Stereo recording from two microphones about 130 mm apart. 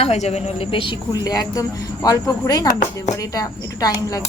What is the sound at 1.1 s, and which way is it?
Speech, 30° left (ahead or behind).